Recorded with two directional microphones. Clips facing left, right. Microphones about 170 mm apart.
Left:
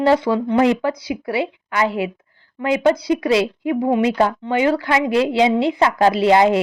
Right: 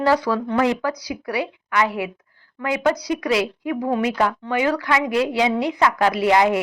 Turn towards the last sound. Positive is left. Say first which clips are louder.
# left 3 dB
turn(degrees=25)  # may be behind; listen again after turning